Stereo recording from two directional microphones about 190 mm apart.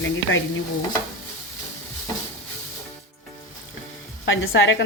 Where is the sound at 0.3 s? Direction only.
90° left.